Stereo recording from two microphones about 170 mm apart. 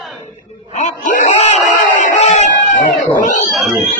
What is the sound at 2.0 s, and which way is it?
Music, 40° left (ahead or behind).